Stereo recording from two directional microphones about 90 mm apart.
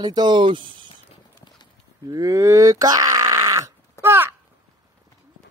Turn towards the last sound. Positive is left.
turn(degrees=-25)  # may be behind; listen again after turning